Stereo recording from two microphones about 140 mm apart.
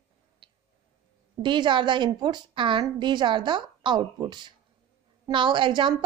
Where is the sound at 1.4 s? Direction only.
35° right (ahead or behind).